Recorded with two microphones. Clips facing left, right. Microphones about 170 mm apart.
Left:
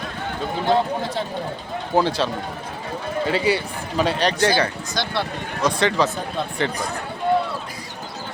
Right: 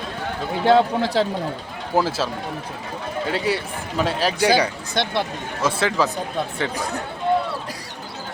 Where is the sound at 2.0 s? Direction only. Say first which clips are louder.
Left 1 dB; 5° right (ahead or behind).